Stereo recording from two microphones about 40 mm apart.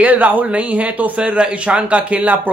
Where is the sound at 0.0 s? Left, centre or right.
Right.